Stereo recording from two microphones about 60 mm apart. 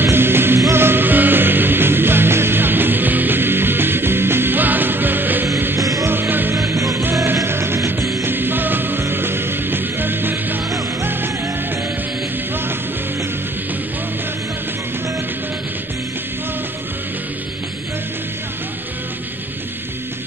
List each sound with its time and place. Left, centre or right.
0.0 s music: right
5.8 s music: right
6.0 s music: right
6.5 s music: right
7.4 s music: right
8.0 s music: right
8.3 s music: right